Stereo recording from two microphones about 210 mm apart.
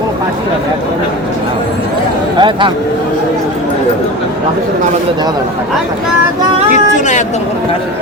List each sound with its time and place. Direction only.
2.4 s speech: 25° right (ahead or behind)
6.9 s vehicle: 35° left (ahead or behind)